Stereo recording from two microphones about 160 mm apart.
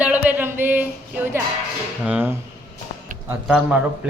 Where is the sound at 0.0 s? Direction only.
10° right (ahead or behind).